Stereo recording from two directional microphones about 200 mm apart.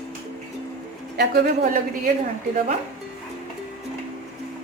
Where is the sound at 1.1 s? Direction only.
55° right (ahead or behind).